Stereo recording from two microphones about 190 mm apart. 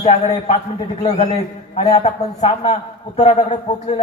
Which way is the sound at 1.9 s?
35° left (ahead or behind).